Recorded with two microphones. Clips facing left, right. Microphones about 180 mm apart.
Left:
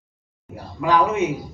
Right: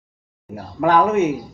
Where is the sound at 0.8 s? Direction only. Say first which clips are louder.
Right 4 dB; 55° right (ahead or behind).